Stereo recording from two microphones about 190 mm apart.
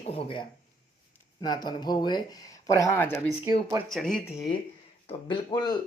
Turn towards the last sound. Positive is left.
turn(degrees=20)  # may be behind; listen again after turning